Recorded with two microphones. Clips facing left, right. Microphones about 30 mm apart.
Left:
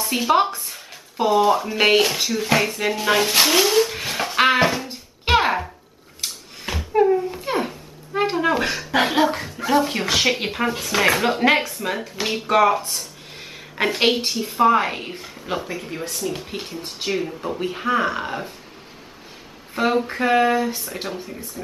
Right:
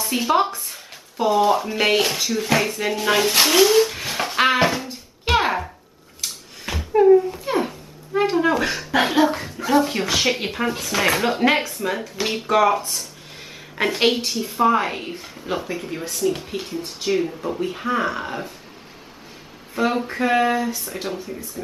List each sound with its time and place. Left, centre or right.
0.0 s speech: centre
1.8 s speech: centre
4.8 s music: left
5.4 s a sound: centre
8.9 s speech: centre
19.8 s speech: centre